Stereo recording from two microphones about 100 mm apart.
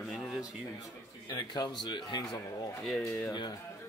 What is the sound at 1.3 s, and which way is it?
Speech, 45° left (ahead or behind).